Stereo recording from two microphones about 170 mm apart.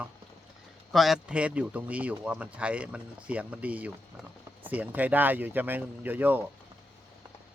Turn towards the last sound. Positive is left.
turn(degrees=-10)  # may be behind; listen again after turning